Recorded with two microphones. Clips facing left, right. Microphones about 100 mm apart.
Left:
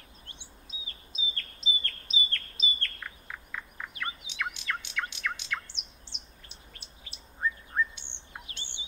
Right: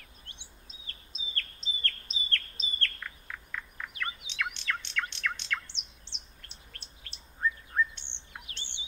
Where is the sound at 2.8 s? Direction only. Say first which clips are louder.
Right 2 dB; 10° left (ahead or behind).